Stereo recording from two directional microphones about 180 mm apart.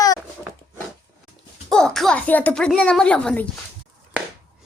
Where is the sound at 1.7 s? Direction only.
5° left (ahead or behind).